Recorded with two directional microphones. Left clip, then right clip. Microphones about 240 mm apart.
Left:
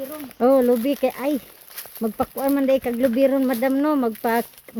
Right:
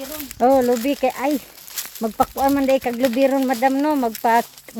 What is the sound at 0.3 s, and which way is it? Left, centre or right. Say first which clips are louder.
Speech: right 1 dB; centre.